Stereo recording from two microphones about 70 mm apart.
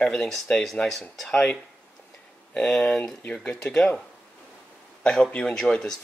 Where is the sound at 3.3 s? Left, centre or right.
Centre.